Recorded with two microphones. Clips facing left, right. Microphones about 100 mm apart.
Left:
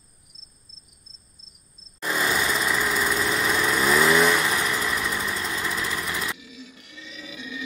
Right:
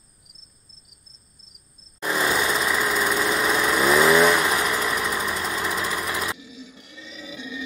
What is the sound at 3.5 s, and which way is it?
Vehicle, 10° right (ahead or behind).